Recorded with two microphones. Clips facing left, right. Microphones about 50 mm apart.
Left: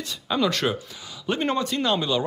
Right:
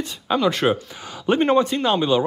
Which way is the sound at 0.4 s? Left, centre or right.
Centre.